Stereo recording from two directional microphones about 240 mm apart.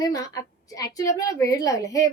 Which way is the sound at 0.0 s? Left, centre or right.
Centre.